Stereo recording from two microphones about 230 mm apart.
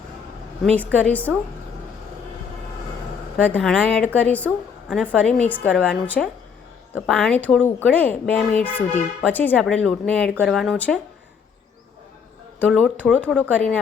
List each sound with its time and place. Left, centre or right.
0.6 s speech: centre
3.4 s a woman's voice: centre
12.5 s a woman's voice: centre